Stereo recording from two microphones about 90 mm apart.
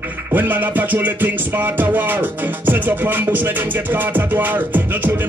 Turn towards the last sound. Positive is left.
turn(degrees=-20)  # may be behind; listen again after turning